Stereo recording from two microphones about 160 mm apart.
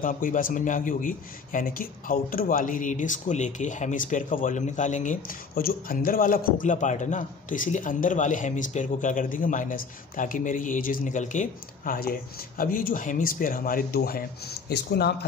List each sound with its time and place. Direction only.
0.0 s a man's voice: 55° left (ahead or behind); by 15.1 s 90° left